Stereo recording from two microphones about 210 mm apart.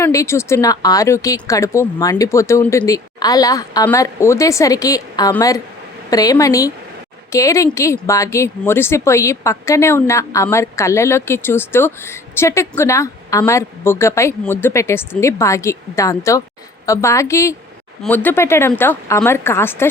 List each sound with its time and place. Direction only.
0.0 s a woman's voice: 15° left (ahead or behind)